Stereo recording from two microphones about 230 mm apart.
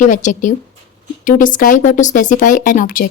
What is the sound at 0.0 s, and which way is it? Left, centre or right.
Speech, left.